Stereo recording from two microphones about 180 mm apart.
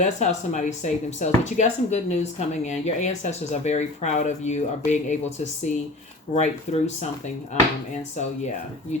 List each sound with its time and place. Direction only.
0.0 s speech: 40° left (ahead or behind)